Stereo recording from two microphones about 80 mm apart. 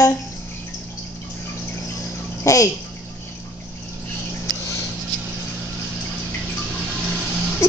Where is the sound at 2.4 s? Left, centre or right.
Left.